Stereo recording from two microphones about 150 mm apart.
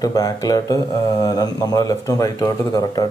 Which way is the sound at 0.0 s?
25° left (ahead or behind).